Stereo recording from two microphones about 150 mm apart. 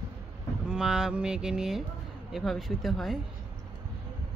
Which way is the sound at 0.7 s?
5° right (ahead or behind).